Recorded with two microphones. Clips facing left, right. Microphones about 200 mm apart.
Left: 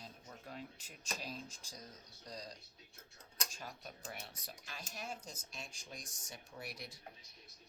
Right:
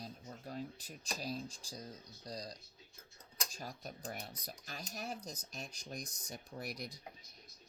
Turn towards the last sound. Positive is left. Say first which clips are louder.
# right 5 dB
turn(degrees=-40)  # may be behind; listen again after turning